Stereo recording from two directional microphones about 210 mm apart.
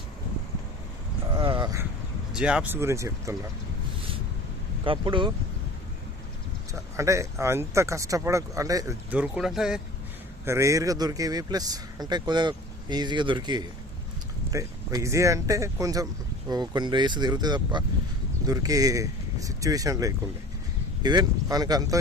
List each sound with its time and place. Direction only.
1.4 s a sound: 25° right (ahead or behind)
2.3 s speech: 5° right (ahead or behind)
4.8 s a man's voice: 25° right (ahead or behind)
6.9 s speech: 15° right (ahead or behind)
10.4 s a man's voice: 15° right (ahead or behind)